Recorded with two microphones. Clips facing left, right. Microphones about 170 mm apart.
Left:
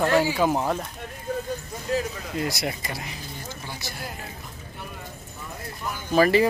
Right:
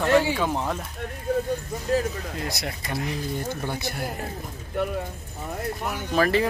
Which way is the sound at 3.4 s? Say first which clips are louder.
Right 7 dB; 55° right (ahead or behind).